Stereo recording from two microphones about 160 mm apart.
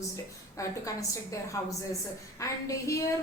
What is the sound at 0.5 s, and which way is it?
A woman's voice, 20° left (ahead or behind).